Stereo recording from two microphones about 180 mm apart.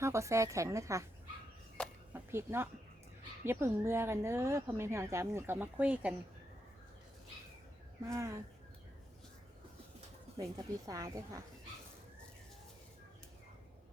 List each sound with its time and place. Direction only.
0.0 s speech: 15° right (ahead or behind)
2.1 s speech: 15° right (ahead or behind)
8.0 s speech: 15° right (ahead or behind)
10.3 s speech: 20° right (ahead or behind)